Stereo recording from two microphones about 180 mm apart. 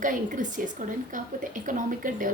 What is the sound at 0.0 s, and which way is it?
A woman's voice, 45° right (ahead or behind).